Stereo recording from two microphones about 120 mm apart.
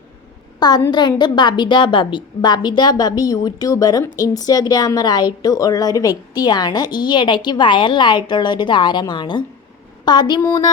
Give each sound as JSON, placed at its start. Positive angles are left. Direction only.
{"t": 0.9, "sound": "a woman's voice", "side_deg": 40}